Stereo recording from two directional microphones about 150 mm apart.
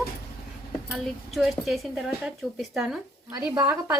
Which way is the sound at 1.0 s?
Centre (ahead or behind).